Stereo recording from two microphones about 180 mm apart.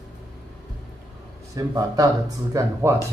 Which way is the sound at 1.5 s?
20° right (ahead or behind).